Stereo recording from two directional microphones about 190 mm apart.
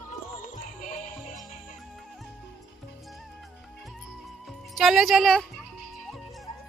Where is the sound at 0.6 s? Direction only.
40° left (ahead or behind).